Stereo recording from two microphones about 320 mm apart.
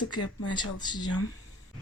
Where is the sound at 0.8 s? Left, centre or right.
Centre.